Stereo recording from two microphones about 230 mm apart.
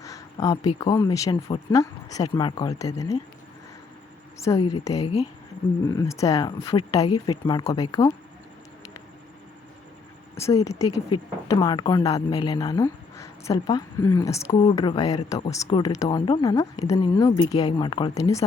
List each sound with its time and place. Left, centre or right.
0.0 s a sound: centre
0.9 s a woman's voice: centre
4.4 s a woman's voice: centre
10.3 s a woman's voice: centre